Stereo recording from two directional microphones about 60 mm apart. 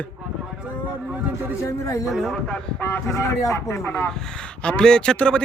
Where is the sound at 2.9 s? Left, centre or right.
Left.